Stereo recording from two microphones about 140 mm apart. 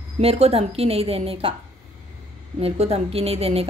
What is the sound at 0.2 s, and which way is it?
A woman's voice, 45° right (ahead or behind).